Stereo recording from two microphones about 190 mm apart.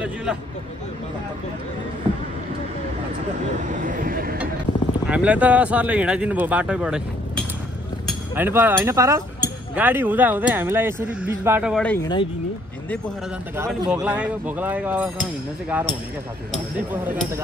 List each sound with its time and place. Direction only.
0.0 s a sound: 5° right (ahead or behind)
3.6 s speech: 40° right (ahead or behind)
5.0 s speech: 5° right (ahead or behind)
11.7 s speech: 5° left (ahead or behind)
12.0 s speech: 25° left (ahead or behind)
14.0 s speech: 5° right (ahead or behind)
16.9 s speech: 10° right (ahead or behind)